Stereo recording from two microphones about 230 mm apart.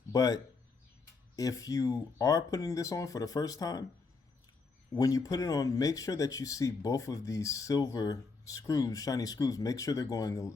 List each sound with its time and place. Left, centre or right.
0.1 s speech: centre
1.4 s speech: centre
4.9 s speech: centre